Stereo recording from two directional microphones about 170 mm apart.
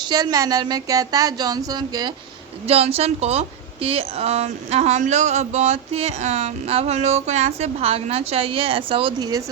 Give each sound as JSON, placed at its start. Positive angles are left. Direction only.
{"t": 0.0, "sound": "speech", "side_deg": -25}
{"t": 2.6, "sound": "a woman's voice", "side_deg": -35}